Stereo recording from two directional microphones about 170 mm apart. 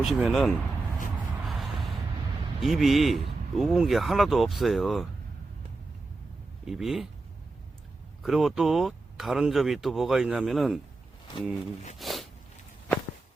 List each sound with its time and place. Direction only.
0.0 s speech: 5° right (ahead or behind)
1.5 s gasp: centre (ahead or behind)
2.6 s speech: centre (ahead or behind)
6.7 s speech: centre (ahead or behind)
8.2 s speech: centre (ahead or behind)
11.9 s a sound: centre (ahead or behind)